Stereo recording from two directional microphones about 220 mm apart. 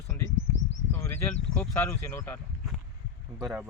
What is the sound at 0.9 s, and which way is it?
Speech, 10° left (ahead or behind).